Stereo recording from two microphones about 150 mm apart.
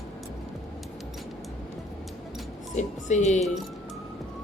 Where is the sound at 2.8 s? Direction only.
50° left (ahead or behind).